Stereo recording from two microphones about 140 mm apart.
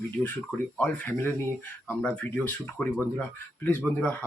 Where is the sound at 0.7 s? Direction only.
10° left (ahead or behind).